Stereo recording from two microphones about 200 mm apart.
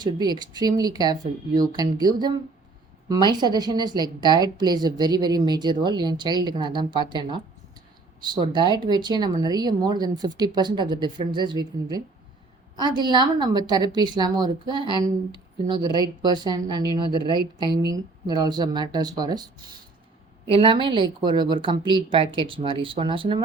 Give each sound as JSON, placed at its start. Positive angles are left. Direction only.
{"t": 0.0, "sound": "a woman's voice", "side_deg": -20}
{"t": 12.7, "sound": "a woman's voice", "side_deg": -20}
{"t": 22.2, "sound": "speech", "side_deg": 20}
{"t": 22.4, "sound": "a woman's voice", "side_deg": -25}